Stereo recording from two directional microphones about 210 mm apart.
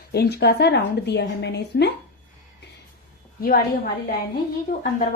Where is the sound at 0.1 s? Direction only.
50° left (ahead or behind).